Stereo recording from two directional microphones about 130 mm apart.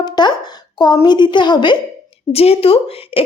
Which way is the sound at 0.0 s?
35° left (ahead or behind).